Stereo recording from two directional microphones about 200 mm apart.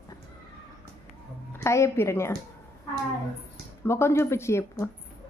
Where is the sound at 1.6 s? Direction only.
15° left (ahead or behind).